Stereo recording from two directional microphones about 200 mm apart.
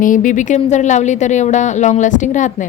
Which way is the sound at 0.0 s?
40° left (ahead or behind).